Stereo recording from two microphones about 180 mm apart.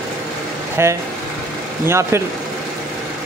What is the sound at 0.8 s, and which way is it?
Speech, 15° right (ahead or behind).